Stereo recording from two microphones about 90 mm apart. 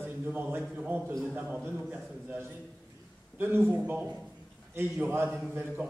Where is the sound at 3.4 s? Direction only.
25° right (ahead or behind).